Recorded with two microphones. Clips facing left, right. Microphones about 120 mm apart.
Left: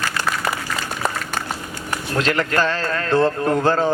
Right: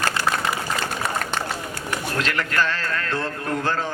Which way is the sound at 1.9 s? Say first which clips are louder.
Left 5 dB; 30° left (ahead or behind).